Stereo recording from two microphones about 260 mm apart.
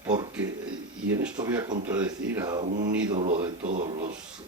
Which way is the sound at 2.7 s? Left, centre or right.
Right.